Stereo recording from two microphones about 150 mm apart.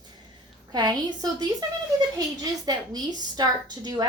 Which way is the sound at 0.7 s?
30° right (ahead or behind).